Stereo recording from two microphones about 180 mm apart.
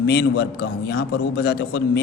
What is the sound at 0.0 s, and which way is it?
A man's voice, 65° left (ahead or behind).